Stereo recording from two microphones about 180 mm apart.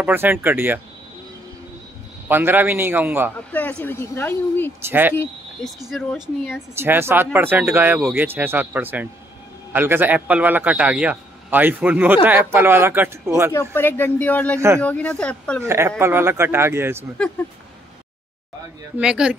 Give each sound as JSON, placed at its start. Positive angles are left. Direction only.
{"t": 0.0, "sound": "a man's voice", "side_deg": -10}
{"t": 2.2, "sound": "a man's voice", "side_deg": -10}
{"t": 3.3, "sound": "speech", "side_deg": 10}
{"t": 4.8, "sound": "a man's voice", "side_deg": -10}
{"t": 5.1, "sound": "speech", "side_deg": 10}
{"t": 5.9, "sound": "speech", "side_deg": 0}
{"t": 6.7, "sound": "a man's voice", "side_deg": -15}
{"t": 13.5, "sound": "speech", "side_deg": 15}
{"t": 15.6, "sound": "a man's voice", "side_deg": -15}
{"t": 18.9, "sound": "speech", "side_deg": -5}